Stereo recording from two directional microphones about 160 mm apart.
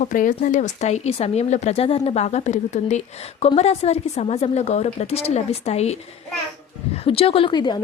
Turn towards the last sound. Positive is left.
turn(degrees=30)  # may be behind; listen again after turning